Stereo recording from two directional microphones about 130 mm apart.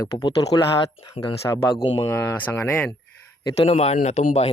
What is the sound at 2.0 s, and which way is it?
Speech, 25° left (ahead or behind).